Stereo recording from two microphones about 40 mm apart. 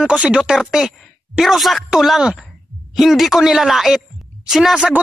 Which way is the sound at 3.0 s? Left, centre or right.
Centre.